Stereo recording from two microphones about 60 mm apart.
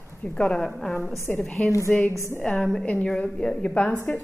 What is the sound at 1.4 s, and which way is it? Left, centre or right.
Speech, centre.